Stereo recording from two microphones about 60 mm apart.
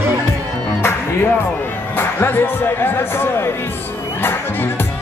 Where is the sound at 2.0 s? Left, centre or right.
Left.